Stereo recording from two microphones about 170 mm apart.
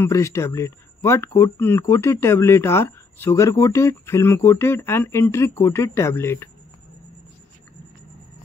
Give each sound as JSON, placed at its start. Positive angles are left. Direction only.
{"t": 0.0, "sound": "speech", "side_deg": 15}